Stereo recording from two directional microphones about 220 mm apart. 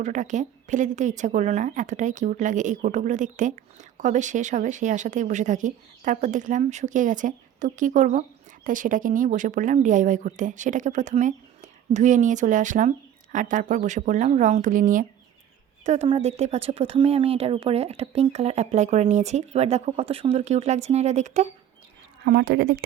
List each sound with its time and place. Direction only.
0.0 s speech: 35° right (ahead or behind)
22.2 s a woman's voice: 45° right (ahead or behind)